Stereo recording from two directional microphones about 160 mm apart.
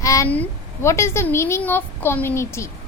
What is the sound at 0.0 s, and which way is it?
A woman's voice, 20° left (ahead or behind).